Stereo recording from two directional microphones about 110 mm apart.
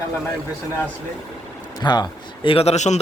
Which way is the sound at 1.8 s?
40° left (ahead or behind).